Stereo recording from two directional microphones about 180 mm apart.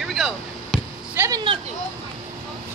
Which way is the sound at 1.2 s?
20° right (ahead or behind).